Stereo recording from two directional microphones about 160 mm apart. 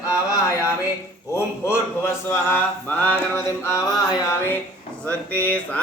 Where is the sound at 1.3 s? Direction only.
15° left (ahead or behind).